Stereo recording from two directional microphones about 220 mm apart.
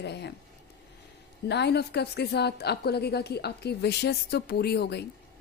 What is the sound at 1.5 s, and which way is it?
A woman's voice, 50° left (ahead or behind).